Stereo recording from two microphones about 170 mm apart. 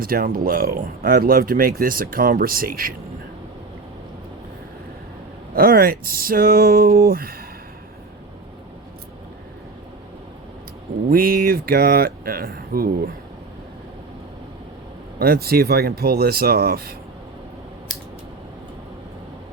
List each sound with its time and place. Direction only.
0.0 s speech: 60° right (ahead or behind)
5.5 s speech: 60° right (ahead or behind)
11.1 s speech: 60° right (ahead or behind)
15.2 s speech: 65° right (ahead or behind)